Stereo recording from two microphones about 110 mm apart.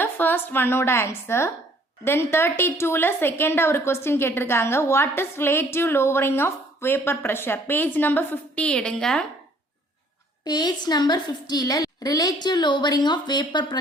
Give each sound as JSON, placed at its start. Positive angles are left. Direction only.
{"t": 0.0, "sound": "a woman's voice", "side_deg": 20}
{"t": 10.4, "sound": "a woman's voice", "side_deg": 40}